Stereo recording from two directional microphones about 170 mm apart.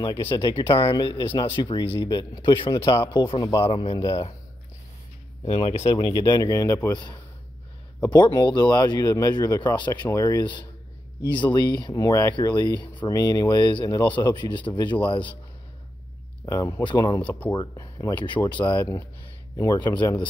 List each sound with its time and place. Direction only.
0.0 s speech: 25° left (ahead or behind)
3.6 s speech: 35° left (ahead or behind)
5.5 s speech: 35° left (ahead or behind)
16.4 s speech: 20° left (ahead or behind)
17.2 s speech: 10° left (ahead or behind)
17.5 s speech: 25° left (ahead or behind)